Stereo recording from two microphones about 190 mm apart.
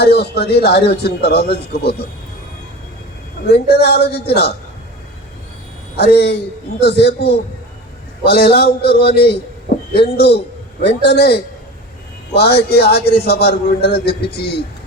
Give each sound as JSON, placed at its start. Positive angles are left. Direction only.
{"t": 0.0, "sound": "speech", "side_deg": 55}
{"t": 3.5, "sound": "speech", "side_deg": 60}
{"t": 6.0, "sound": "speech", "side_deg": 60}